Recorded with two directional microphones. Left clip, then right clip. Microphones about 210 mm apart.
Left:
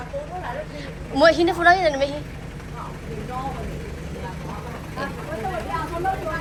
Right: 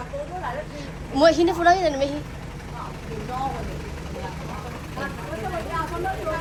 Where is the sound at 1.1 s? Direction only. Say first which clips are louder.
Left 1 dB; 20° right (ahead or behind).